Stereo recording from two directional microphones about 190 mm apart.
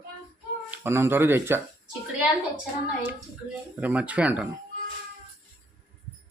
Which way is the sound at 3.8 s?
10° right (ahead or behind).